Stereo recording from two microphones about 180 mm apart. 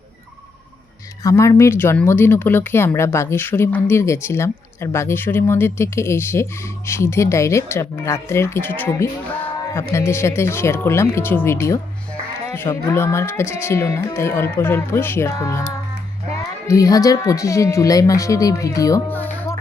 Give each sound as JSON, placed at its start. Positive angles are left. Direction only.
{"t": 1.2, "sound": "speech", "side_deg": 15}
{"t": 16.6, "sound": "speech", "side_deg": 20}